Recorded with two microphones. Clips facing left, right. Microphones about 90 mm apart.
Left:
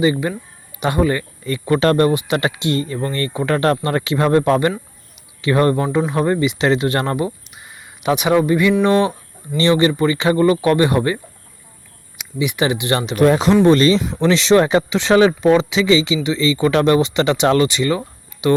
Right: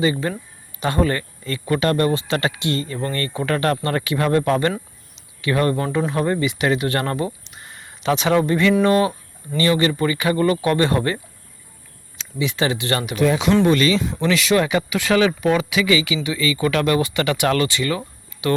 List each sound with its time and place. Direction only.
0.0 s speech: 15° left (ahead or behind)
2.1 s speech: 20° left (ahead or behind)
5.8 s speech: 15° left (ahead or behind)
7.3 s a sound: 5° left (ahead or behind)
8.0 s speech: 15° left (ahead or behind)
8.8 s speech: 25° left (ahead or behind)
13.1 s speech: 50° left (ahead or behind)
13.7 s speech: 35° left (ahead or behind)